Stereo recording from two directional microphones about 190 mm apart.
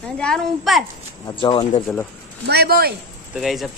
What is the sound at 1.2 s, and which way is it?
Speech, 25° left (ahead or behind).